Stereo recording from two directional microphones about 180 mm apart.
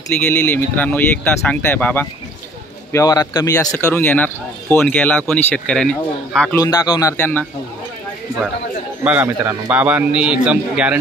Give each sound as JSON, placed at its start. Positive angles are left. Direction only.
{"t": 0.2, "sound": "speech", "side_deg": 10}
{"t": 6.5, "sound": "speech", "side_deg": 20}
{"t": 9.0, "sound": "a man's voice", "side_deg": -10}